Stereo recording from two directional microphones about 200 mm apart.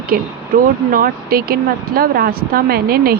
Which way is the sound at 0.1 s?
45° right (ahead or behind).